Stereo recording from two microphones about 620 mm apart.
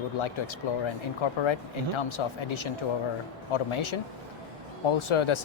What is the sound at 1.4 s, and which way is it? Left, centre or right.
A man's voice, left.